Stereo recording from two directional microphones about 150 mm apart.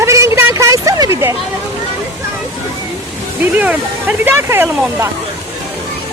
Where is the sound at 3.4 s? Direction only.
10° right (ahead or behind).